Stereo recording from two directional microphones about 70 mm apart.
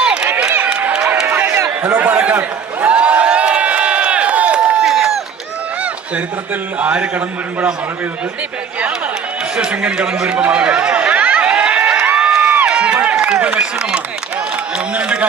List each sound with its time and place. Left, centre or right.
0.0 s run: centre
0.5 s run: right
2.0 s a man's voice: right
2.8 s run: centre
4.8 s run: centre
6.7 s a man's voice: centre
9.6 s speech: centre
10.3 s a sound: centre
12.6 s a sound: centre
13.0 s run: right
14.9 s speech: centre